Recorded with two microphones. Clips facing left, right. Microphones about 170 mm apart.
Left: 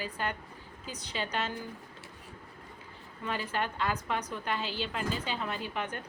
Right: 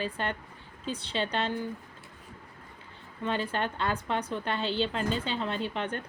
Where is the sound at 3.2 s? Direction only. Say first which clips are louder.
Right 3 dB; 25° right (ahead or behind).